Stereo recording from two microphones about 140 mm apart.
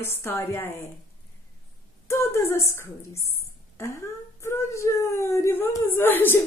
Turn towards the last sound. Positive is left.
turn(degrees=15)  # may be behind; listen again after turning